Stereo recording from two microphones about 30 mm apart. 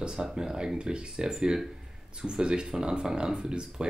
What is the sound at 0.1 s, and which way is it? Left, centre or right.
Speech, right.